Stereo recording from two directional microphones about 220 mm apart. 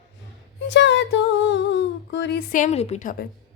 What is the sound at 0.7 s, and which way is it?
Speech, 55° left (ahead or behind).